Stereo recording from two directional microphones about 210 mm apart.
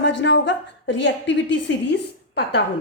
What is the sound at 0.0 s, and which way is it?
A woman's voice, 60° left (ahead or behind).